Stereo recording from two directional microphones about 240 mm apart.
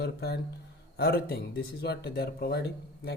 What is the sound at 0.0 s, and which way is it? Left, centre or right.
Speech, left.